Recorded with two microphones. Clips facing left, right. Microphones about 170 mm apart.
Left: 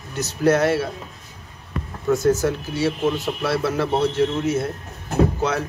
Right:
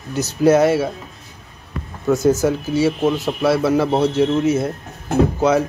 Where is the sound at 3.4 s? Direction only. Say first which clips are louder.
Right 7 dB; 15° right (ahead or behind).